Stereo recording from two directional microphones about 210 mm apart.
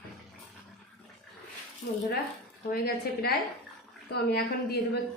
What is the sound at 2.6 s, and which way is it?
A woman's voice, 45° left (ahead or behind).